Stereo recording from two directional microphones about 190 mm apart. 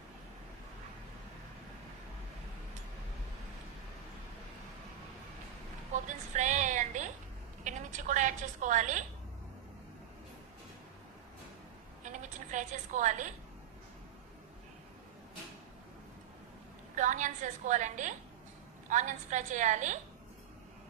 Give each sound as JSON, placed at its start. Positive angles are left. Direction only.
{"t": 5.9, "sound": "a woman's voice", "side_deg": -40}
{"t": 12.0, "sound": "a woman's voice", "side_deg": -40}
{"t": 16.9, "sound": "a woman's voice", "side_deg": -40}